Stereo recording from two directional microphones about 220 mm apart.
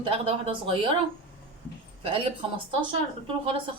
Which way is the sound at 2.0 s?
25° right (ahead or behind).